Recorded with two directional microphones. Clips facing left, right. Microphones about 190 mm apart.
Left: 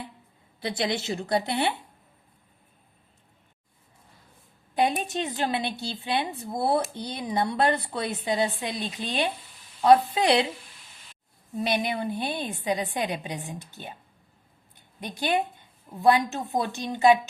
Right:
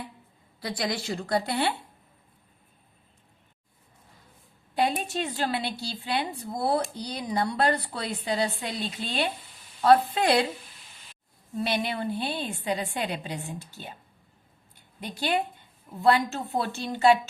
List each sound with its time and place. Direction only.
0.6 s a woman's voice: 25° left (ahead or behind)
4.8 s a woman's voice: 20° left (ahead or behind)
11.5 s a woman's voice: 15° left (ahead or behind)